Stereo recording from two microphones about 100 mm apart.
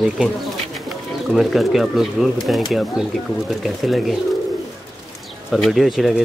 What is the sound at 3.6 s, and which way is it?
Speech, centre (ahead or behind).